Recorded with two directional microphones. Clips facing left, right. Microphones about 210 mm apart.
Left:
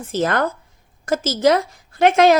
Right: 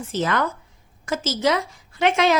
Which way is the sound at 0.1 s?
45° left (ahead or behind).